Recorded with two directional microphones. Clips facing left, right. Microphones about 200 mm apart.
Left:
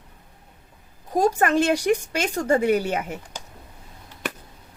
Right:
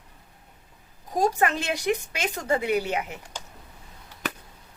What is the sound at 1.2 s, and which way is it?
Speech, 50° left (ahead or behind).